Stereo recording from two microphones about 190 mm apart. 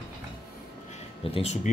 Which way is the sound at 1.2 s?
30° left (ahead or behind).